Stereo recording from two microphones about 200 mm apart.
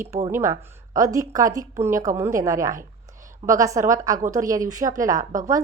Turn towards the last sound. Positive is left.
turn(degrees=-40)  # may be behind; listen again after turning